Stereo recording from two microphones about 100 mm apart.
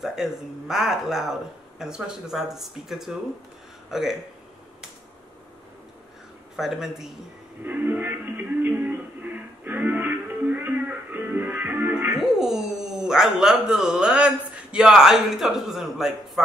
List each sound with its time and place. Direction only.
0.0 s speech: 5° right (ahead or behind)
6.5 s speech: 5° right (ahead or behind)
7.6 s a sound: 20° right (ahead or behind)
8.6 s music: 20° right (ahead or behind)
12.1 s speech: 5° right (ahead or behind)